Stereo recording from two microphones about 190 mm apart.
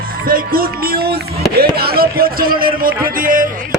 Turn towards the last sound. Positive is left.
turn(degrees=-45)  # may be behind; listen again after turning